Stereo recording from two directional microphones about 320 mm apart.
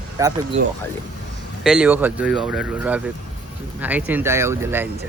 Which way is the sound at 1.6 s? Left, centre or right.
Centre.